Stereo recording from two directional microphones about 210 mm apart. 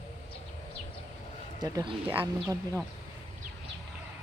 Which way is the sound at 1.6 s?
20° right (ahead or behind).